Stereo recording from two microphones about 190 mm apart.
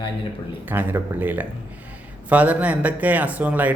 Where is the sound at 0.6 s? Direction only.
10° right (ahead or behind).